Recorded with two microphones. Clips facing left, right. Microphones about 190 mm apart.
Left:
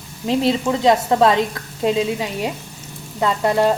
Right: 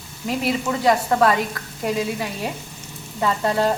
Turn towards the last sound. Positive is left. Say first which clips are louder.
# left 3 dB
turn(degrees=15)  # may be behind; listen again after turning